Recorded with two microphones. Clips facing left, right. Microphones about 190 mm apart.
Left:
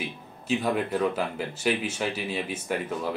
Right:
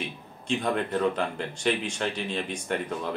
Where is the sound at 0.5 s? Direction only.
5° left (ahead or behind).